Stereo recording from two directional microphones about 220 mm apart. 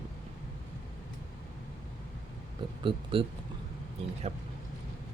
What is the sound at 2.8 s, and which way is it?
Speech, 25° right (ahead or behind).